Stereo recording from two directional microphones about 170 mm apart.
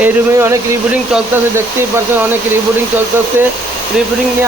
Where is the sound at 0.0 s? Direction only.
15° right (ahead or behind).